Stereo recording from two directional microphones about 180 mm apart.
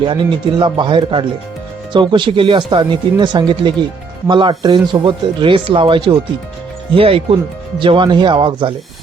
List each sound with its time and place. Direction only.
0.6 s speech: 25° right (ahead or behind)